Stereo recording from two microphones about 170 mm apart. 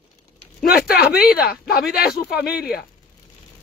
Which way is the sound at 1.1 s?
65° left (ahead or behind).